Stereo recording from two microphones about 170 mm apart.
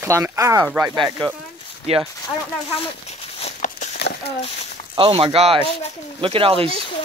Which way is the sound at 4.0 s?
70° left (ahead or behind).